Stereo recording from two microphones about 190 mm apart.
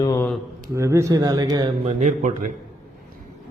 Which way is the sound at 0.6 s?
15° right (ahead or behind).